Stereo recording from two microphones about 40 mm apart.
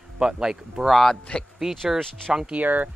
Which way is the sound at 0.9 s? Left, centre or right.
Centre.